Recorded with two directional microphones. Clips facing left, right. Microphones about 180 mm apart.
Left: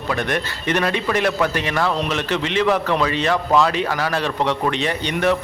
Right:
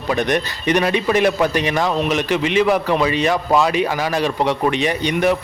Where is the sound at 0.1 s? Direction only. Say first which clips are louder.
Right 4 dB; 20° right (ahead or behind).